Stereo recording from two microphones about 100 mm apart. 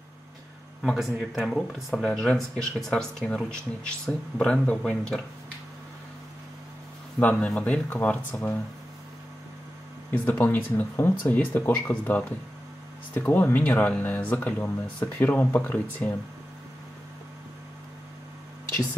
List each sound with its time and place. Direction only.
0.8 s speech: 5° right (ahead or behind)
7.2 s speech: 15° left (ahead or behind)
10.1 s speech: 20° left (ahead or behind)